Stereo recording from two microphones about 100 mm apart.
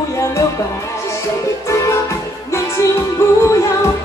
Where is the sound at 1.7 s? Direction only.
30° left (ahead or behind).